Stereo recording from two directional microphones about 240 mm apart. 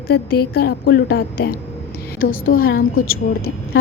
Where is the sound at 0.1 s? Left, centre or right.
Left.